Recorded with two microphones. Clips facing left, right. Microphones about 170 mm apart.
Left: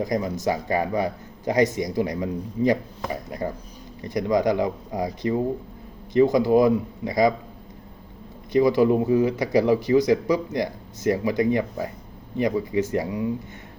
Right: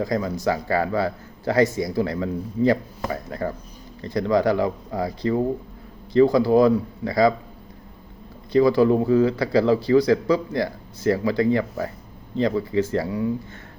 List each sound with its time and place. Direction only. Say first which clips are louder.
0.0 s speech: right 1 dB; 15° left (ahead or behind)
8.5 s speech: right 1 dB; 20° left (ahead or behind)